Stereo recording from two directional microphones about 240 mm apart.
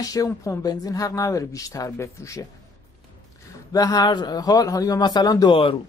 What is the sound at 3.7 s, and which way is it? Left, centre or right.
Speech, centre.